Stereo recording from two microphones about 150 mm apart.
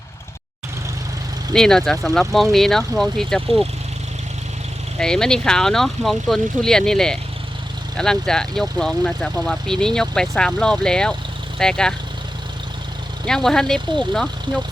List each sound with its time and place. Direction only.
1.5 s speech: 5° left (ahead or behind)
4.9 s speech: 5° left (ahead or behind)
13.2 s speech: 5° left (ahead or behind)